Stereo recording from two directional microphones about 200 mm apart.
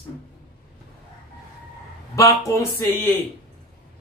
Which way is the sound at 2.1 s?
15° left (ahead or behind).